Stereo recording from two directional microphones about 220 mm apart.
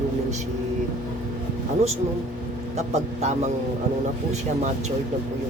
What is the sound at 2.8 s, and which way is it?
Speech, 30° right (ahead or behind).